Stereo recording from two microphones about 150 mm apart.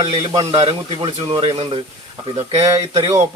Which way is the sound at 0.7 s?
30° right (ahead or behind).